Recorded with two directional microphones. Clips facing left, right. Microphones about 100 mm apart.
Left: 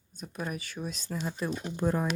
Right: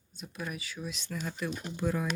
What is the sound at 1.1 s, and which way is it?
Speech, 25° left (ahead or behind).